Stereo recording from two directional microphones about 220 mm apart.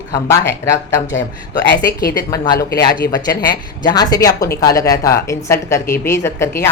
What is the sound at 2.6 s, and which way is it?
Speech, 45° left (ahead or behind).